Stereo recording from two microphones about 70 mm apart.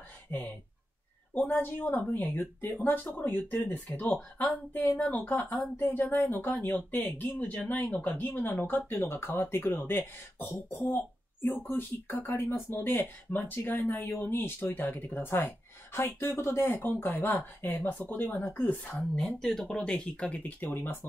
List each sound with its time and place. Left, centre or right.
0.3 s speech: left
4.9 s speech: centre
5.3 s speech: left
18.9 s speech: centre; by 21.1 s left